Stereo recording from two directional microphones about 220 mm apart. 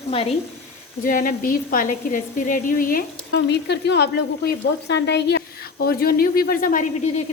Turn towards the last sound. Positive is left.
turn(degrees=30)  # may be behind; listen again after turning